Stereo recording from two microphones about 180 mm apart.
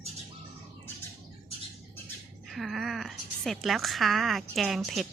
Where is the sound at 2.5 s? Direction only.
Centre (ahead or behind).